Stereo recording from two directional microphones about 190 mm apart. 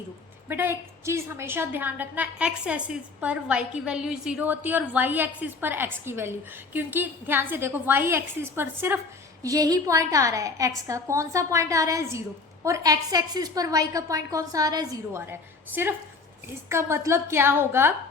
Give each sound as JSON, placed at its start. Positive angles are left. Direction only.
{"t": 0.4, "sound": "a woman's voice", "side_deg": -10}